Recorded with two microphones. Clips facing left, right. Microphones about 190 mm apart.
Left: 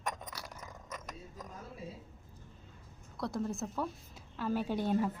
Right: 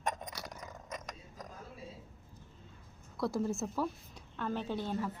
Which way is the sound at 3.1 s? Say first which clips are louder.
Right 3 dB; centre (ahead or behind).